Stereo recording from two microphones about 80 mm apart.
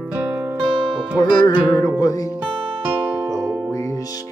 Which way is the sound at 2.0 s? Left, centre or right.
Left.